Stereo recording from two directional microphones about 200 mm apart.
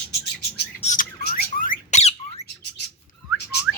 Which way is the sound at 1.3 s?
45° left (ahead or behind).